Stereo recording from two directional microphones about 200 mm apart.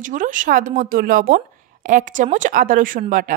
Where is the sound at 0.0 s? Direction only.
40° right (ahead or behind).